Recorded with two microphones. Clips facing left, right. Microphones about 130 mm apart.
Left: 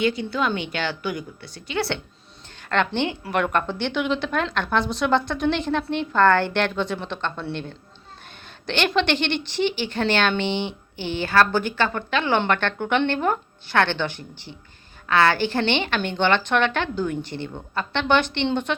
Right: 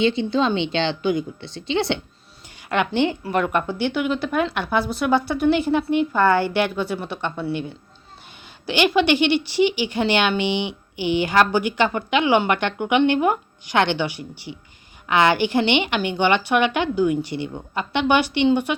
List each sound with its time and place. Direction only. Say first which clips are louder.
0.0 s a woman's voice: right 4 dB; 25° right (ahead or behind)